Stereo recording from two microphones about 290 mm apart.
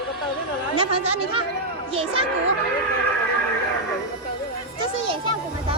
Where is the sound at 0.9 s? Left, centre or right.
Right.